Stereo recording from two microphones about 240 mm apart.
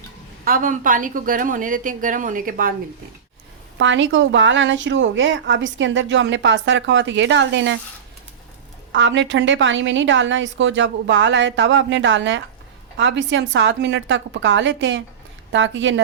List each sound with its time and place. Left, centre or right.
0.4 s a woman's voice: right
3.8 s a woman's voice: right
8.9 s a woman's voice: right